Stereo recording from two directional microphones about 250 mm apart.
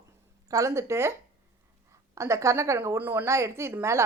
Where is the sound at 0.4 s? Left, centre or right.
Centre.